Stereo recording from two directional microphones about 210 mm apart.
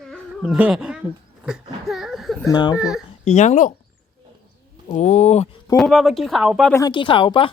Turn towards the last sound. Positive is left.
turn(degrees=25)  # may be behind; listen again after turning